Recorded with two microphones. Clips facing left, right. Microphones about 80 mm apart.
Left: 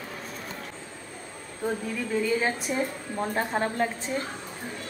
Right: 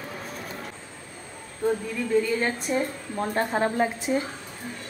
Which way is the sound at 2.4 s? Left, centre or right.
Centre.